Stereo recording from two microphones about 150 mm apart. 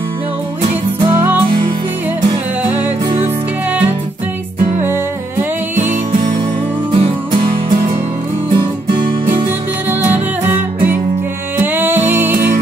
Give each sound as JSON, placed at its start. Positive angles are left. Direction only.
{"t": 0.6, "sound": "music", "side_deg": -35}
{"t": 1.1, "sound": "music", "side_deg": -15}
{"t": 6.9, "sound": "music", "side_deg": -35}
{"t": 11.6, "sound": "music", "side_deg": -15}